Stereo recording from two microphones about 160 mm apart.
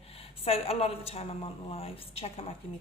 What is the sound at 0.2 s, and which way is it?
A woman's voice, 35° left (ahead or behind).